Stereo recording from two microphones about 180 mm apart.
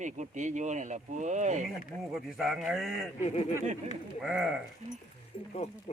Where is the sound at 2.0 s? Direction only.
Centre (ahead or behind).